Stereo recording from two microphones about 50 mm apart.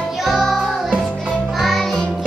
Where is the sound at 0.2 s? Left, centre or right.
Centre.